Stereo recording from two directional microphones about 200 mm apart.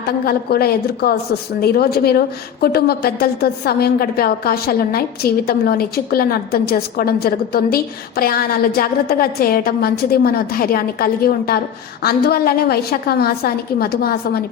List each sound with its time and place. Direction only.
0.3 s a woman's voice: 50° left (ahead or behind)